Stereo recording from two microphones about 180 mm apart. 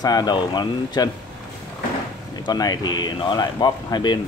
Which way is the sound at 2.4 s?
20° left (ahead or behind).